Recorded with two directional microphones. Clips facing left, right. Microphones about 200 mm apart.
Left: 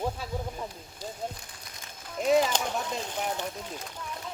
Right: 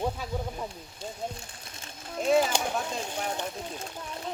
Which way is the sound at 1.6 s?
25° right (ahead or behind).